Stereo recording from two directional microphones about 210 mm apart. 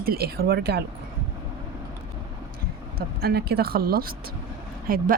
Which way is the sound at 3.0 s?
45° right (ahead or behind).